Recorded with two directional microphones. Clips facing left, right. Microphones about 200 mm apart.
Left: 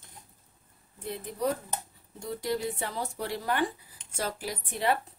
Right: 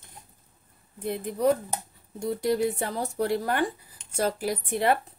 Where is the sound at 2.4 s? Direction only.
50° right (ahead or behind).